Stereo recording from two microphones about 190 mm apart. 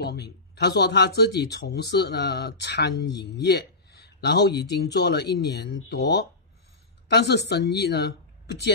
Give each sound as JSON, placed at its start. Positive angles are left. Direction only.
{"t": 0.0, "sound": "speech", "side_deg": 60}